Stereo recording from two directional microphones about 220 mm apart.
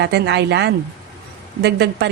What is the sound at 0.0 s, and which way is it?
A woman's voice, 50° right (ahead or behind).